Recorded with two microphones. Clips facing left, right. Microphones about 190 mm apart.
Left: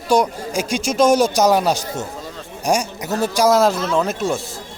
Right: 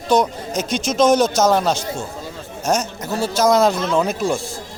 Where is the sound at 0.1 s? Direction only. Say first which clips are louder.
Even; 10° left (ahead or behind).